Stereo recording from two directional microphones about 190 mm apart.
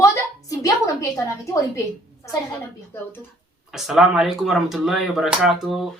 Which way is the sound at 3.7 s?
Centre (ahead or behind).